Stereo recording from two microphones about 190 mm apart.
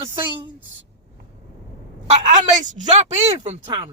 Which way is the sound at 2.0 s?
35° right (ahead or behind).